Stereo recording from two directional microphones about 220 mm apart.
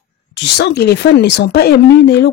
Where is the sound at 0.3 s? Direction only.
50° left (ahead or behind).